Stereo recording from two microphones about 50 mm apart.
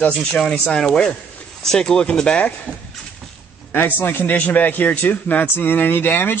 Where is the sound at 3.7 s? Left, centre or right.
Left.